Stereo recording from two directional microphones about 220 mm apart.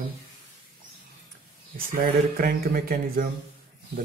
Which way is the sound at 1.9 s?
40° right (ahead or behind).